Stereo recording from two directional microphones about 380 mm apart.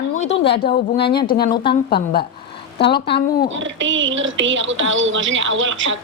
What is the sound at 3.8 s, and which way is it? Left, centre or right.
Speech, right.